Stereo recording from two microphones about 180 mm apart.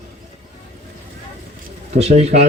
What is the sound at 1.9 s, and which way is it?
Speech, 35° right (ahead or behind).